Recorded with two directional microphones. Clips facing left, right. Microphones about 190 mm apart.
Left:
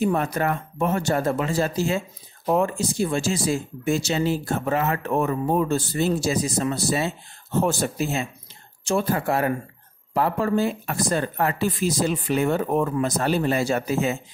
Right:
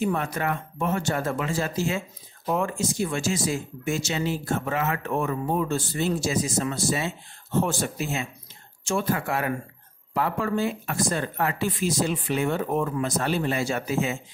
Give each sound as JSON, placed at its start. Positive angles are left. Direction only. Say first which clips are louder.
{"t": 0.0, "sound": "speech", "louder": "left 4 dB", "side_deg": 40}